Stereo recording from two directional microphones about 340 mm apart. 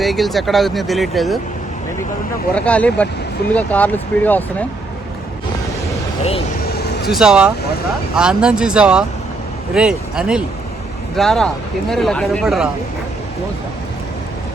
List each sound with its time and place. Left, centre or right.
0.0 s speech: centre
2.6 s speech: centre
6.7 s vehicle: left
7.1 s speech: centre